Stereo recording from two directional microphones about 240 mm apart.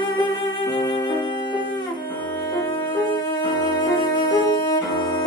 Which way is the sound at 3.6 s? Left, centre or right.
Centre.